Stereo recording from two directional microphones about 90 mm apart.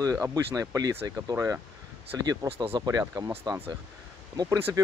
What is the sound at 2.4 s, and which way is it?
Speech, 90° right.